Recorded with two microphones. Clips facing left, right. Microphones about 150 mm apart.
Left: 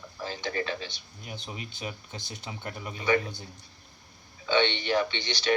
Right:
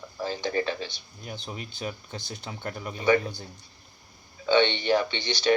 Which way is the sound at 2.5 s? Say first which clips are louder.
Right 3 dB; 35° right (ahead or behind).